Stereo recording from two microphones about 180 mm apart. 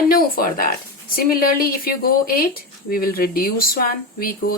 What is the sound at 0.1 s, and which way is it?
Speech, 55° left (ahead or behind).